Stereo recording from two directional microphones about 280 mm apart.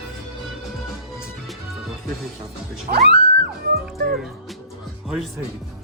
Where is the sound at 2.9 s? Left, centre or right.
Right.